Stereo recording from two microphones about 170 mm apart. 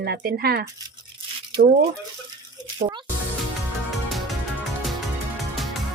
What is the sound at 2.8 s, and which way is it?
Speech, 55° right (ahead or behind).